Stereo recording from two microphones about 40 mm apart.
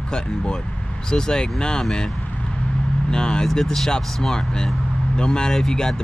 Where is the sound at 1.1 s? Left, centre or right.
Centre.